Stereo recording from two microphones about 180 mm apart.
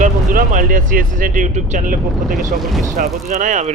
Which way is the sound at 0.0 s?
45° right (ahead or behind).